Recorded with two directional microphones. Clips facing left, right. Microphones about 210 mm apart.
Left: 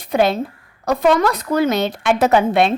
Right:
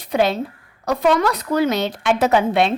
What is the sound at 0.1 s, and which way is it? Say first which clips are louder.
A woman's voice: left 2 dB; 50° left (ahead or behind).